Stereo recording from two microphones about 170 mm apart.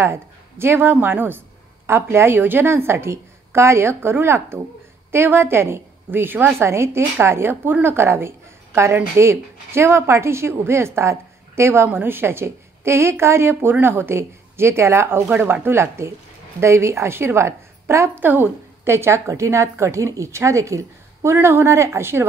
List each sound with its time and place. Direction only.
0.0 s a woman's voice: 15° right (ahead or behind)